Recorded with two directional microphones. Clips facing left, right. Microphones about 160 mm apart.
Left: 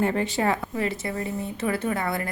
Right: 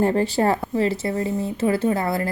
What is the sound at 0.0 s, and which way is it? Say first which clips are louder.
Speech: right 5 dB; 35° right (ahead or behind).